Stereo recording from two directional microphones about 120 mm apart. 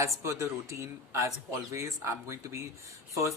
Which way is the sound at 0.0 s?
25° right (ahead or behind).